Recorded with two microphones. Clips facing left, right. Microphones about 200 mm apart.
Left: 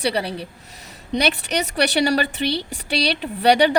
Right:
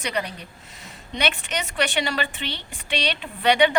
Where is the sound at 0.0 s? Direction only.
35° left (ahead or behind).